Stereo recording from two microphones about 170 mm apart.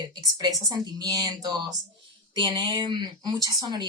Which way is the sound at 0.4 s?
25° right (ahead or behind).